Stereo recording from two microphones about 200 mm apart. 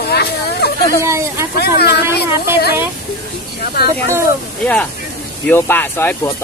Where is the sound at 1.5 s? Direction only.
55° left (ahead or behind).